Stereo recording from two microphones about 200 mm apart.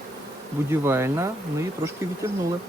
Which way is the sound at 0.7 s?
10° right (ahead or behind).